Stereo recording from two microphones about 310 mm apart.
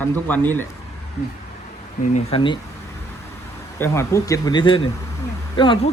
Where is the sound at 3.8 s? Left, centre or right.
Centre.